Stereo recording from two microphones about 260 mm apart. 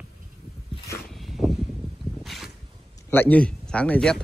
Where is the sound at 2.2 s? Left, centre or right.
Centre.